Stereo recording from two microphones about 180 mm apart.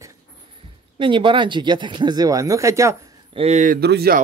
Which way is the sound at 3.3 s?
40° right (ahead or behind).